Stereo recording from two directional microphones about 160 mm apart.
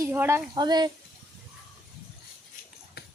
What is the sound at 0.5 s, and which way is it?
Speech, 25° right (ahead or behind).